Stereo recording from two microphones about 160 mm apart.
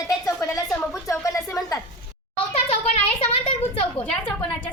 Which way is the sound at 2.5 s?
40° left (ahead or behind).